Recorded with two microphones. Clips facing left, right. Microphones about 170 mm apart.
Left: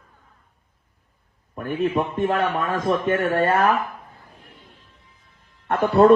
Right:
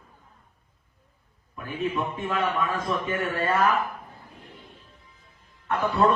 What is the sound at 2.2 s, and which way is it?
A man's voice, 55° left (ahead or behind).